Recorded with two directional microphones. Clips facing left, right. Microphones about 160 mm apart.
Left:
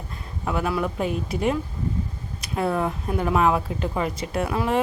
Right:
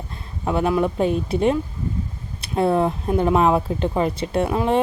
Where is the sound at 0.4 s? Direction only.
25° right (ahead or behind).